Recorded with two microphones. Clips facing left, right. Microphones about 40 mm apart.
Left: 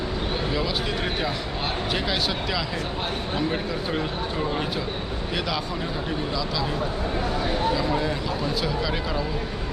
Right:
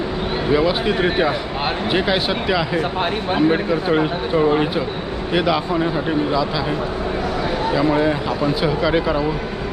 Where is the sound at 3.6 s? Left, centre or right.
Right.